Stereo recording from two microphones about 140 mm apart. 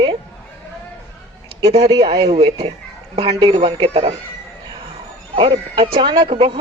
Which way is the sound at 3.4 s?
35° right (ahead or behind).